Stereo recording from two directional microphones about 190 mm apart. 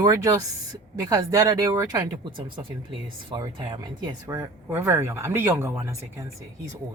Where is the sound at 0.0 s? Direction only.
20° right (ahead or behind).